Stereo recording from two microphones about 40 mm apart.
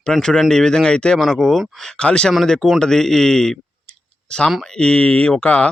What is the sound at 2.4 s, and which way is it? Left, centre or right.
Speech, centre.